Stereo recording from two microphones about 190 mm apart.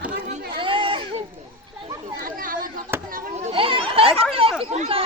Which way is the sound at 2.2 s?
45° right (ahead or behind).